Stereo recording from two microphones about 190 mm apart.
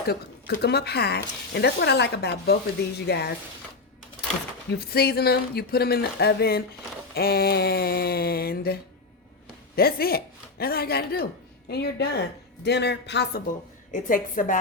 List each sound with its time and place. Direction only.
0.1 s speech: 55° left (ahead or behind)
4.8 s speech: 55° left (ahead or behind)
13.9 s a woman's voice: 45° left (ahead or behind)